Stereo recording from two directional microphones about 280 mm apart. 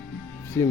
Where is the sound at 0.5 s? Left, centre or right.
Centre.